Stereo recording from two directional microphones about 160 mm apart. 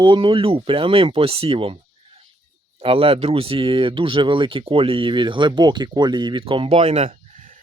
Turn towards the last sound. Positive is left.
turn(degrees=-40)  # may be behind; listen again after turning